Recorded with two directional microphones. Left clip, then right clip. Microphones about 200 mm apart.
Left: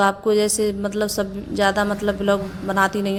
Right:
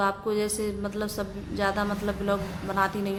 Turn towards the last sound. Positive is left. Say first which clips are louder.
# left 7 dB
turn(degrees=35)  # may be behind; listen again after turning